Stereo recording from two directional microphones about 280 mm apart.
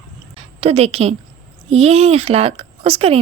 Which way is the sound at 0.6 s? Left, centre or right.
Right.